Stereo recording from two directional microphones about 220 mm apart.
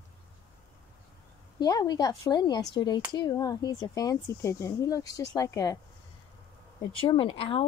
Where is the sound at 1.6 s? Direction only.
20° left (ahead or behind).